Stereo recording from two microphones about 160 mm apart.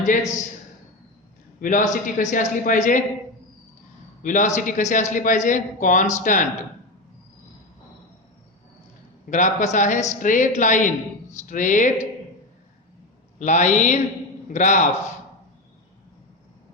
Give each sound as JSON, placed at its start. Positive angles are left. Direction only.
{"t": 0.0, "sound": "a man's voice", "side_deg": 50}
{"t": 1.6, "sound": "speech", "side_deg": 55}
{"t": 4.2, "sound": "speech", "side_deg": 55}
{"t": 9.3, "sound": "speech", "side_deg": 50}
{"t": 13.4, "sound": "speech", "side_deg": 50}